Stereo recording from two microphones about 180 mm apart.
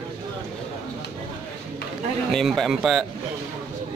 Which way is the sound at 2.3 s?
Centre (ahead or behind).